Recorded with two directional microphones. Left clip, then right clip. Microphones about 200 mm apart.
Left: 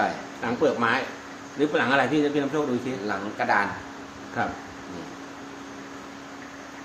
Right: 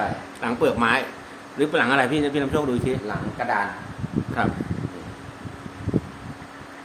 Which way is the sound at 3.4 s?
30° left (ahead or behind).